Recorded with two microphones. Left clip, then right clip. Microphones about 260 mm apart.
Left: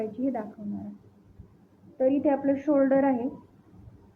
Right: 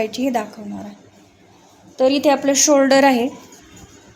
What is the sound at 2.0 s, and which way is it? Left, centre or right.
A woman's voice, right.